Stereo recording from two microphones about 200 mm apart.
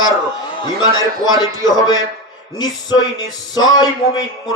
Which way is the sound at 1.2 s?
20° left (ahead or behind).